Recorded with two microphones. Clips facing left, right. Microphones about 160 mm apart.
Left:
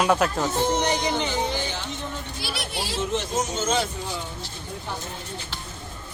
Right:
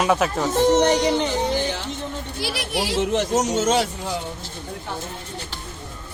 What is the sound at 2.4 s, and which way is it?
Speech, 85° right.